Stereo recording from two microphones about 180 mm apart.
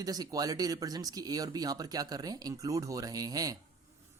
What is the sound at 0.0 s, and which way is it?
Speech, 20° right (ahead or behind).